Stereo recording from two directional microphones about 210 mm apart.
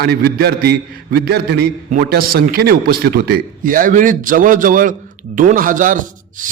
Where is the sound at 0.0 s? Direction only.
45° right (ahead or behind).